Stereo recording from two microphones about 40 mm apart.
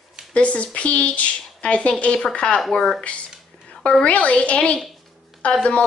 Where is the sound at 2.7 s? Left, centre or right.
Centre.